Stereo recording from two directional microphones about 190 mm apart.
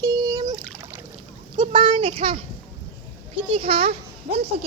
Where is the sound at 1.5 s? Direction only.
30° right (ahead or behind).